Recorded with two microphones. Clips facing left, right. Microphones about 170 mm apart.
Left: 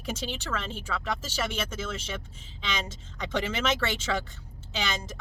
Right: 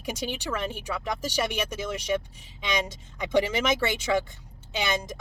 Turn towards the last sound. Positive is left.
turn(degrees=-15)  # may be behind; listen again after turning